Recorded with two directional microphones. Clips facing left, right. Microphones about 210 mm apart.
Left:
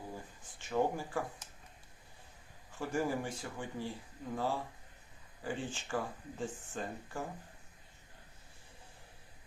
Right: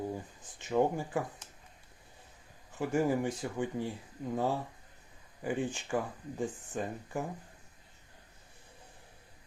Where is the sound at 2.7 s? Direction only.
20° right (ahead or behind).